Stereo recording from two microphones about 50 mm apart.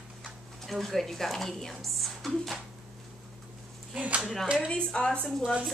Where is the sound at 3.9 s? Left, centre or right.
Right.